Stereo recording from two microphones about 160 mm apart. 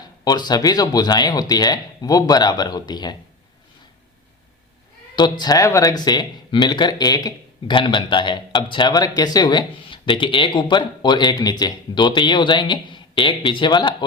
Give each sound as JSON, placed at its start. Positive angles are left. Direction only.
{"t": 0.0, "sound": "speech", "side_deg": 25}
{"t": 5.1, "sound": "speech", "side_deg": 25}